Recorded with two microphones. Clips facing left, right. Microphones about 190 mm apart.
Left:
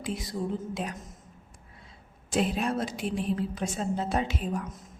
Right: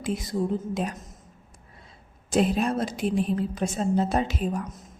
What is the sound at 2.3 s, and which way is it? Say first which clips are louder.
A woman's voice: right 4 dB; 40° right (ahead or behind).